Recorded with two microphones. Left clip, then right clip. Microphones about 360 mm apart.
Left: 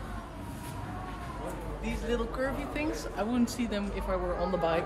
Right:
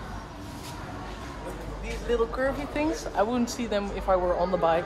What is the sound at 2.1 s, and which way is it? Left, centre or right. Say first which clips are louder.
Speech: right 7 dB; centre.